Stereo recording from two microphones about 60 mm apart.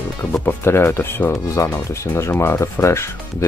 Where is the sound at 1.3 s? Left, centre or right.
Left.